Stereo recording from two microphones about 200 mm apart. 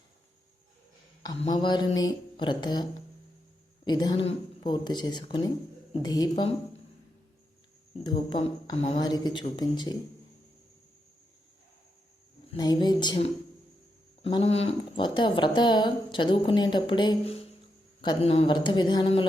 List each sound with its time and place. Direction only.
1.4 s speech: 25° left (ahead or behind)
3.8 s speech: 20° left (ahead or behind)
8.0 s speech: 25° left (ahead or behind)
12.5 s speech: 20° left (ahead or behind)